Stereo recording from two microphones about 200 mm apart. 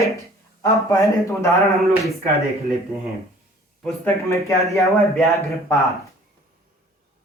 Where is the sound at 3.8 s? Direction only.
5° left (ahead or behind).